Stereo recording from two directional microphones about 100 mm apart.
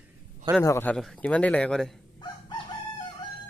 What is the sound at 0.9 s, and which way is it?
Speech, 10° left (ahead or behind).